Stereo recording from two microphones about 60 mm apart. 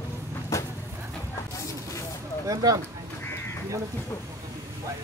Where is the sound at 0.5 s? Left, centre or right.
Left.